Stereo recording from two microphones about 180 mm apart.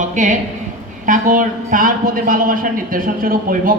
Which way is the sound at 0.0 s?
45° right (ahead or behind).